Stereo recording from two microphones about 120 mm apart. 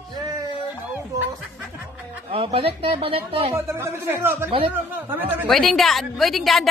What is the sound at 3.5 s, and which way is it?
Speech, 20° right (ahead or behind).